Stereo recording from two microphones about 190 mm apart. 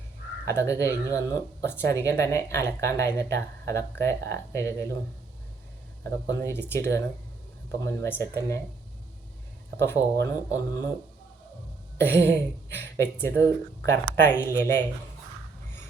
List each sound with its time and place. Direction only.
0.4 s speech: 15° left (ahead or behind)
6.2 s speech: 15° left (ahead or behind)
7.9 s speech: 15° left (ahead or behind)
9.7 s speech: 15° left (ahead or behind)
11.9 s speech: 15° left (ahead or behind)